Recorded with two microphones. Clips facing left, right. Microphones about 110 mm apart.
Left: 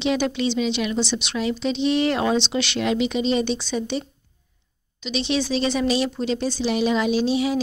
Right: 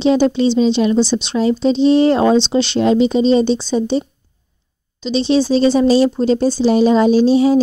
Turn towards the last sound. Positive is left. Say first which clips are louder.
# right 10 dB
turn(degrees=-35)  # may be behind; listen again after turning